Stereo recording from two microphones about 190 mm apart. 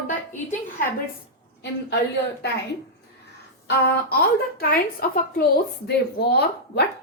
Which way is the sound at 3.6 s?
50° left (ahead or behind).